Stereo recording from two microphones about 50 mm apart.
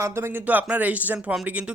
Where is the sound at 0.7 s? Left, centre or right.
Right.